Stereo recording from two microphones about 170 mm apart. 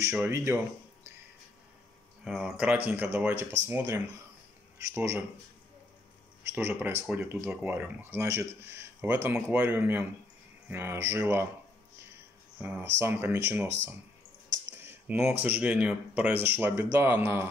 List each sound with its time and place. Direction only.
0.0 s speech: 15° right (ahead or behind)
2.2 s speech: 5° right (ahead or behind)
6.5 s speech: 10° right (ahead or behind)
12.5 s speech: 10° right (ahead or behind)
14.7 s a sound: 15° right (ahead or behind)
15.4 s speech: 10° right (ahead or behind)